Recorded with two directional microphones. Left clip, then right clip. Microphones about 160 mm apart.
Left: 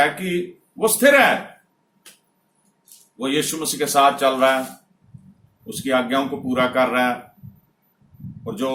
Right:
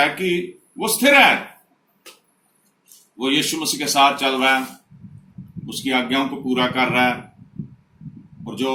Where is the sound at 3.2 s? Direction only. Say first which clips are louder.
Right 2 dB; 25° left (ahead or behind).